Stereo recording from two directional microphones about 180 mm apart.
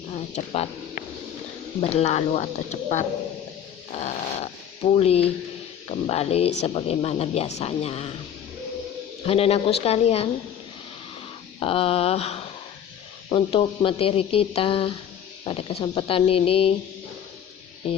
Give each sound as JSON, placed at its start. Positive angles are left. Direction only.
{"t": 0.1, "sound": "a sound", "side_deg": 35}
{"t": 1.8, "sound": "speech", "side_deg": 35}
{"t": 9.2, "sound": "speech", "side_deg": 35}
{"t": 11.6, "sound": "speech", "side_deg": 30}